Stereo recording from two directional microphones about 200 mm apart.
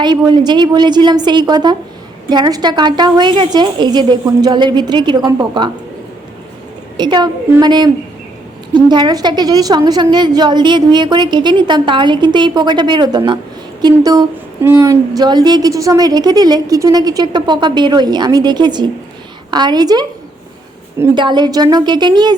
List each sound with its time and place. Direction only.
0.0 s a woman's voice: 20° right (ahead or behind)
6.9 s a woman's voice: 20° right (ahead or behind)
21.2 s a woman's voice: 20° right (ahead or behind)